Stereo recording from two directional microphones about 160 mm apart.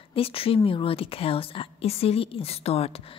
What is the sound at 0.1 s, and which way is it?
A woman's voice, 35° left (ahead or behind).